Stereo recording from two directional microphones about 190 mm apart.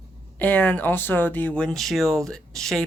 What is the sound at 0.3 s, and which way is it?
Speech, 10° left (ahead or behind).